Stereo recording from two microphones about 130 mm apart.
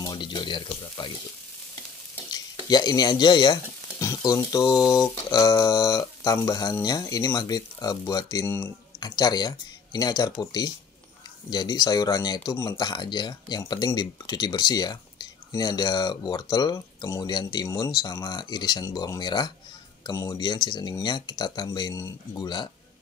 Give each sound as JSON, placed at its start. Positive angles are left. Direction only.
{"t": 0.0, "sound": "a sound", "side_deg": 35}
{"t": 2.3, "sound": "speech", "side_deg": 30}
{"t": 4.0, "sound": "sizzle", "side_deg": 30}
{"t": 4.5, "sound": "speech", "side_deg": 30}